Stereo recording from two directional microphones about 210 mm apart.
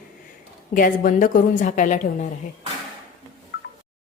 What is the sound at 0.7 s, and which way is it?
A woman's voice, 40° left (ahead or behind).